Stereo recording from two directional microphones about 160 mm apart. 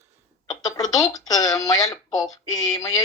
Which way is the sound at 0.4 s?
25° left (ahead or behind).